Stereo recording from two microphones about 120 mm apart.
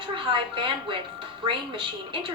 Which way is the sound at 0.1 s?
45° right (ahead or behind).